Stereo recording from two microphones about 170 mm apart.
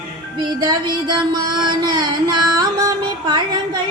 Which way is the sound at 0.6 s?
25° right (ahead or behind).